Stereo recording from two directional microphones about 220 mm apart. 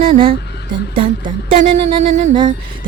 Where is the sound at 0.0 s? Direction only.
25° right (ahead or behind).